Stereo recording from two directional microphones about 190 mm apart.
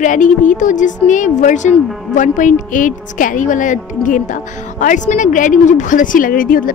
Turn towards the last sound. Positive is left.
turn(degrees=45)  # may be behind; listen again after turning